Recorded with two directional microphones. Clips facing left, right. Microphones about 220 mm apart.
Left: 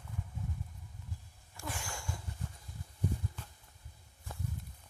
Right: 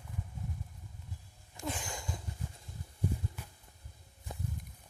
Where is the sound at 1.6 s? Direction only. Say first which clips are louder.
Right 4 dB; 20° right (ahead or behind).